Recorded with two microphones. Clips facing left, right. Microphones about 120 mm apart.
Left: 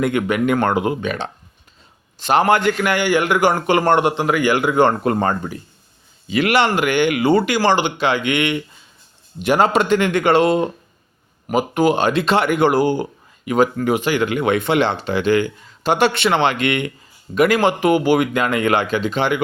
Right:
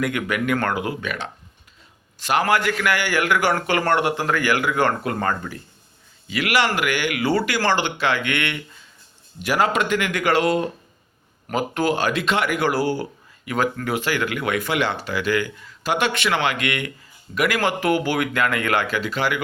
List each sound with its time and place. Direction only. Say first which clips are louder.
0.0 s speech: left 5 dB; 25° left (ahead or behind)